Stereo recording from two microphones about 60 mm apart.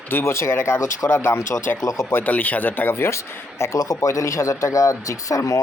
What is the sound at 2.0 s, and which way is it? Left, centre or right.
Speech, left.